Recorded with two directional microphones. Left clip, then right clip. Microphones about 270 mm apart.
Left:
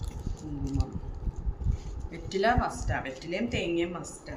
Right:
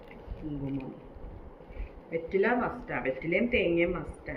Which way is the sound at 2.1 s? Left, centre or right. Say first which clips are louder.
Left 1 dB; left.